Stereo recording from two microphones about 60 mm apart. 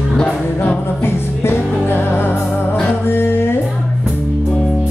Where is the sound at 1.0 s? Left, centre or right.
Left.